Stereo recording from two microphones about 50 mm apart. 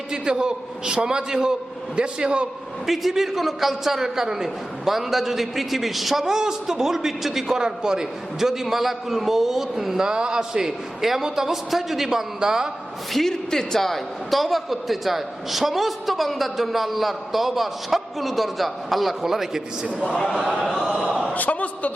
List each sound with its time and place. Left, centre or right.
0.1 s a man's voice: centre
2.8 s a man's voice: centre
13.1 s a man's voice: centre
20.6 s a man's voice: centre
21.3 s a man's voice: left